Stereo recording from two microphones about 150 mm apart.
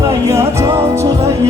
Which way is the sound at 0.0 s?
20° right (ahead or behind).